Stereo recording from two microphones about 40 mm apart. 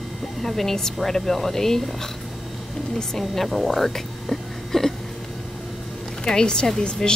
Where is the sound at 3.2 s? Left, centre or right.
Centre.